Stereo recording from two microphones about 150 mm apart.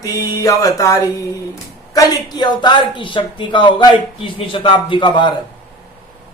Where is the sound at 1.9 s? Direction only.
25° left (ahead or behind).